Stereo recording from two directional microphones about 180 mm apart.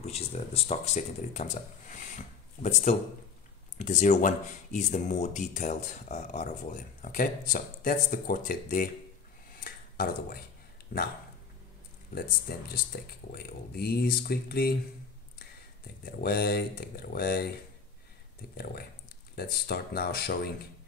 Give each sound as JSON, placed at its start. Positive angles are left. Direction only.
{"t": 0.0, "sound": "speech", "side_deg": 35}
{"t": 9.6, "sound": "a sound", "side_deg": 55}
{"t": 12.1, "sound": "speech", "side_deg": 55}
{"t": 16.1, "sound": "speech", "side_deg": 60}
{"t": 19.3, "sound": "speech", "side_deg": 60}